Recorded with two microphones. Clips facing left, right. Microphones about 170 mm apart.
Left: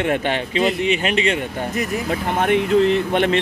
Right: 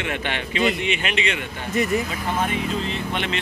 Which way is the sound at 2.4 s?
65° left (ahead or behind).